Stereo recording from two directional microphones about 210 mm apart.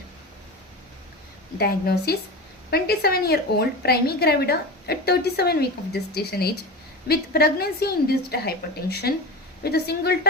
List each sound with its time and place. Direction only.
1.5 s a woman's voice: 50° left (ahead or behind)